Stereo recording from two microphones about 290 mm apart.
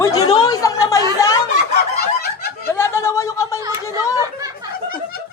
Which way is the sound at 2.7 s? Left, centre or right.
Centre.